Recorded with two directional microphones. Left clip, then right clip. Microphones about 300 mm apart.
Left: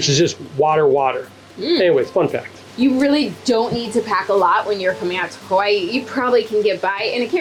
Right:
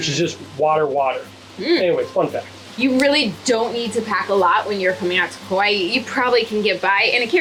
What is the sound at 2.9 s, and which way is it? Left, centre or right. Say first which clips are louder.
Speech: right 4 dB; centre.